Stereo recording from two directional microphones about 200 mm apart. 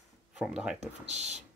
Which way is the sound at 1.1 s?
35° right (ahead or behind).